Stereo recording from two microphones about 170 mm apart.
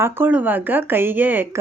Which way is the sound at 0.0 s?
10° right (ahead or behind).